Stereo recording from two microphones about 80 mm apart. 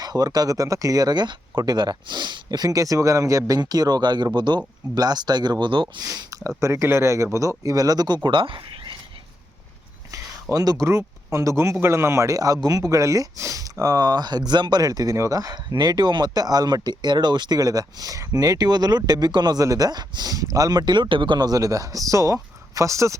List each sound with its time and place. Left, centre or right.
0.0 s speech: right
6.0 s speech: right
6.6 s speech: right
10.5 s speech: right
10.8 s speech: right
17.6 s speech: right
19.6 s speech: right
21.4 s speech: right